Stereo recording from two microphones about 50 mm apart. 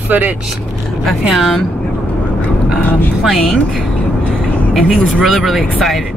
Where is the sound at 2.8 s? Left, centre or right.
Left.